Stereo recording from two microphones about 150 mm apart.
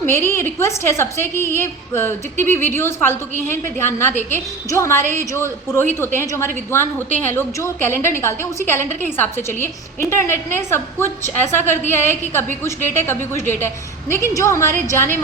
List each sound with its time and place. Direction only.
0.0 s a woman's voice: 15° left (ahead or behind)